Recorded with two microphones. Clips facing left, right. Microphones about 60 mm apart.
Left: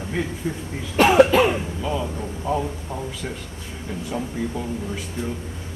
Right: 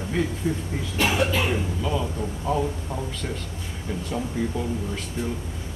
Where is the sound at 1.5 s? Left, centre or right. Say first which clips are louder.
Even; centre.